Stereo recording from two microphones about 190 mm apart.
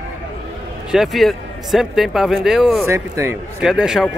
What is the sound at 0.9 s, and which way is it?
Speech, centre (ahead or behind).